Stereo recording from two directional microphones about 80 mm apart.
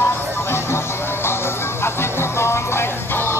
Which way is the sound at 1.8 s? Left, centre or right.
Left.